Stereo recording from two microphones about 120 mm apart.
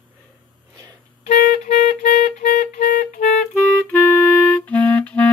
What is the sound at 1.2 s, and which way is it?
Clarinet, 90° left.